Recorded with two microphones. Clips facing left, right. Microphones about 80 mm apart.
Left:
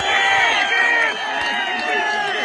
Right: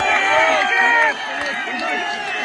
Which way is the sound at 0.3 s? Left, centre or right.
Right.